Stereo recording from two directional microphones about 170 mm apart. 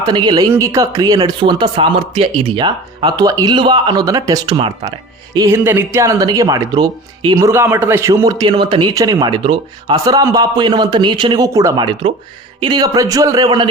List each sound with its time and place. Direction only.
0.0 s speech: 25° right (ahead or behind)
7.3 s speech: 15° right (ahead or behind)